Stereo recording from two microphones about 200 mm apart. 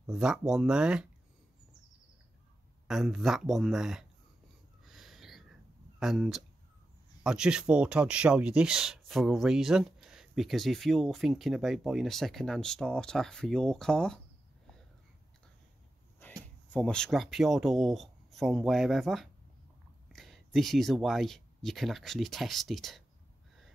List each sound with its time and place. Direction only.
0.0 s speech: 5° right (ahead or behind)
2.9 s speech: centre (ahead or behind)
4.8 s a sound: centre (ahead or behind)
5.9 s speech: centre (ahead or behind)
16.2 s speech: 10° left (ahead or behind)